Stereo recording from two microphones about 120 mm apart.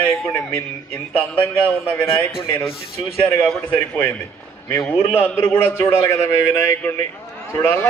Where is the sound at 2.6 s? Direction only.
50° left (ahead or behind).